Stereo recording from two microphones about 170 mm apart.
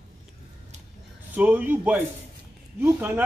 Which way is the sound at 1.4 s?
10° right (ahead or behind).